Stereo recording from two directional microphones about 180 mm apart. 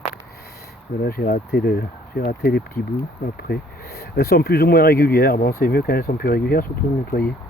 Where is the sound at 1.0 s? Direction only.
55° left (ahead or behind).